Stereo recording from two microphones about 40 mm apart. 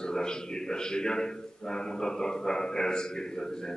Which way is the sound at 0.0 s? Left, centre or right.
Centre.